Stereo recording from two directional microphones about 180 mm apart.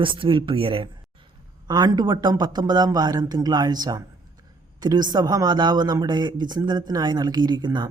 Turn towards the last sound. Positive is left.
turn(degrees=-25)  # may be behind; listen again after turning